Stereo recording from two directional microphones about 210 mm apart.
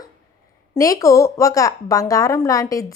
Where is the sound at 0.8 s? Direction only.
15° left (ahead or behind).